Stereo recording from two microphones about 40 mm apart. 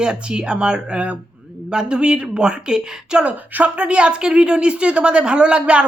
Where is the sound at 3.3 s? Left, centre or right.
Right.